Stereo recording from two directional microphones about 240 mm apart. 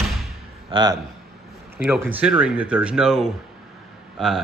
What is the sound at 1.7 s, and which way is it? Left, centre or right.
Speech, centre.